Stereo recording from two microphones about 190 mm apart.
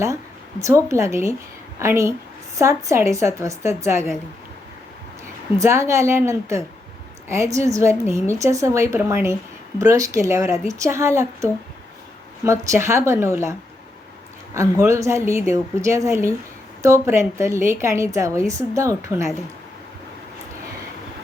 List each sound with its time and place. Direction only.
0.6 s speech: 15° right (ahead or behind)
5.5 s speech: 15° right (ahead or behind)
12.5 s speech: 15° right (ahead or behind)